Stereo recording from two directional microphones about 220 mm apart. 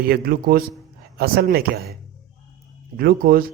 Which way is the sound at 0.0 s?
40° right (ahead or behind).